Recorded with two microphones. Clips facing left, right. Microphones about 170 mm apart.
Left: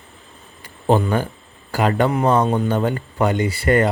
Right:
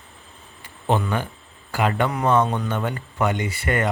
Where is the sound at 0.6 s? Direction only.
40° left (ahead or behind).